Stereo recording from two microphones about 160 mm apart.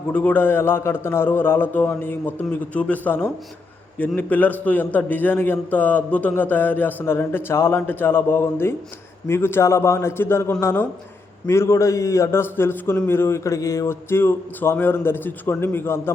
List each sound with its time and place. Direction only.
0.1 s a man's voice: 10° left (ahead or behind)